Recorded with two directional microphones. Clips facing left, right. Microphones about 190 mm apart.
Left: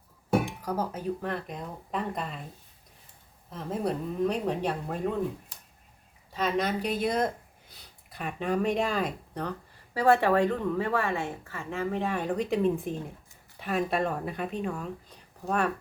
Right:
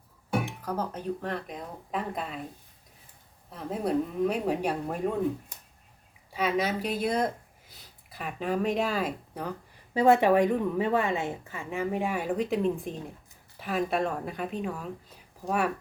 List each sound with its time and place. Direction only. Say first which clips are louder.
0.4 s speech: left 1 dB; 10° left (ahead or behind)
3.5 s speech: right 2 dB; centre (ahead or behind)
6.3 s speech: even; 5° right (ahead or behind)
9.9 s a woman's voice: right 2 dB; 20° right (ahead or behind)